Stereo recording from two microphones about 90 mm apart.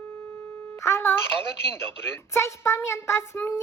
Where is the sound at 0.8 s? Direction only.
30° left (ahead or behind).